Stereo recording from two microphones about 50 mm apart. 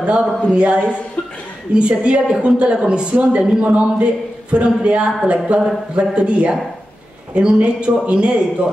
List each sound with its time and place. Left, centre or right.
0.0 s a man's voice: right